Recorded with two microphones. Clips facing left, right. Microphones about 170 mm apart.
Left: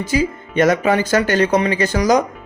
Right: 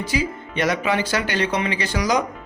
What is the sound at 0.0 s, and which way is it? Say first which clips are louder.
Speech: left 5 dB; 45° left (ahead or behind).